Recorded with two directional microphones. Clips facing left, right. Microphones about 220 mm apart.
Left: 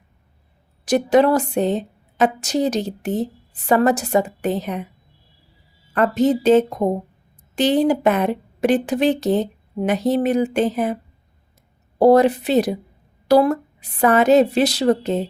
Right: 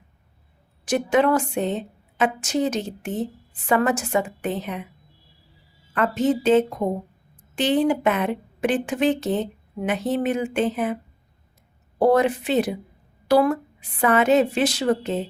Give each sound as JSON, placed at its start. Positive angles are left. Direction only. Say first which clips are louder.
{"t": 0.9, "sound": "speech", "louder": "left 4 dB", "side_deg": 40}
{"t": 5.9, "sound": "speech", "louder": "left 4 dB", "side_deg": 40}
{"t": 11.9, "sound": "speech", "louder": "left 5 dB", "side_deg": 40}